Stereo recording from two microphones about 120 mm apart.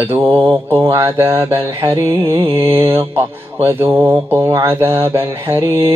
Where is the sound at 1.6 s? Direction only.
45° right (ahead or behind).